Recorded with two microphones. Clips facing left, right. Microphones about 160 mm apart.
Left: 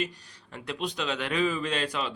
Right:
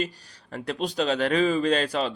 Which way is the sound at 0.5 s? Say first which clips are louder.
Right 6 dB; 40° right (ahead or behind).